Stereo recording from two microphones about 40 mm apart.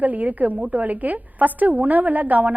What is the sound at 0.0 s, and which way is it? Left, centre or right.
A woman's voice, right.